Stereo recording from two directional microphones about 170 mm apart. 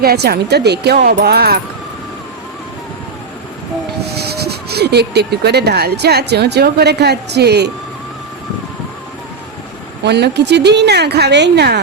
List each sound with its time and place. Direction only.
0.0 s speech: 65° right (ahead or behind)
4.0 s speech: 70° right (ahead or behind)
10.0 s a woman's voice: 80° right